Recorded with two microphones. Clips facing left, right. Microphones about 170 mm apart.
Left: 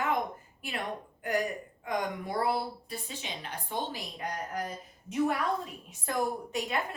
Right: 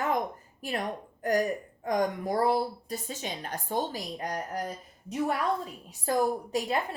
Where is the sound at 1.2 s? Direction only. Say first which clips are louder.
Right 4 dB; 40° right (ahead or behind).